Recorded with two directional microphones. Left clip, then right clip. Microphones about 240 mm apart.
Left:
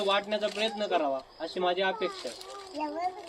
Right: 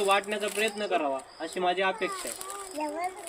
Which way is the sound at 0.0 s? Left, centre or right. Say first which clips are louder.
Right 2 dB; centre.